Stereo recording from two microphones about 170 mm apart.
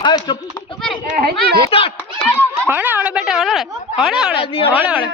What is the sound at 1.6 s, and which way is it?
Speech, 35° left (ahead or behind).